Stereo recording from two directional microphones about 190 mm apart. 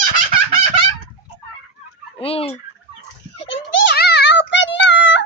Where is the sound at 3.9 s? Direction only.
60° left (ahead or behind).